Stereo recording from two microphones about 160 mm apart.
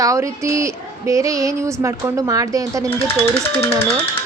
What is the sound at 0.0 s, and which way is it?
A woman's voice, 20° right (ahead or behind).